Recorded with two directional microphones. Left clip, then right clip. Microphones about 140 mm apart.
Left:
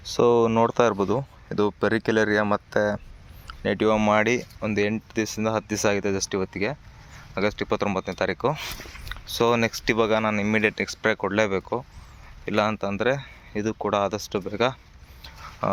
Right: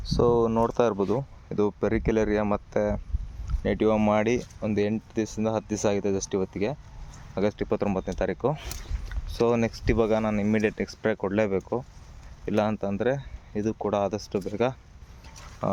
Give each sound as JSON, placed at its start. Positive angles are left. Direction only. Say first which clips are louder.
{"t": 0.2, "sound": "speech", "louder": "left 3 dB", "side_deg": 5}
{"t": 9.2, "sound": "speech", "louder": "left 3 dB", "side_deg": -10}